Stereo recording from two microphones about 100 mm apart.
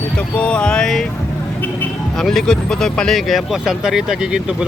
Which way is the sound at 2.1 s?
5° left (ahead or behind).